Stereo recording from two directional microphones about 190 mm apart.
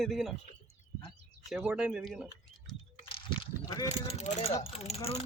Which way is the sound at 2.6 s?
25° left (ahead or behind).